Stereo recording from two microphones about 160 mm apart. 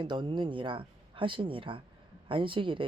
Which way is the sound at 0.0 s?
30° right (ahead or behind).